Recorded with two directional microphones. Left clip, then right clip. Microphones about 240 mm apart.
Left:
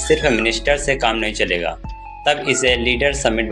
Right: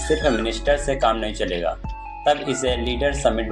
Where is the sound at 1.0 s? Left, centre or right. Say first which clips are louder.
Left 1 dB; left.